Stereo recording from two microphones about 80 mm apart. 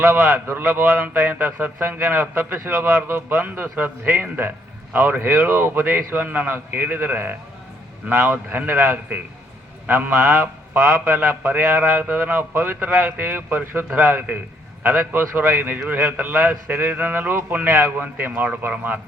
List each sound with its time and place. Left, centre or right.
0.0 s a man's voice: right